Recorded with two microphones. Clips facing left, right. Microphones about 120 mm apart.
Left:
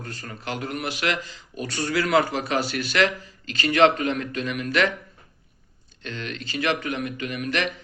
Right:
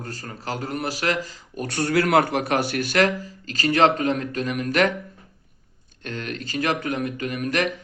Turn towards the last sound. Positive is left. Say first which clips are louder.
# right 3 dB
turn(degrees=-40)  # may be behind; listen again after turning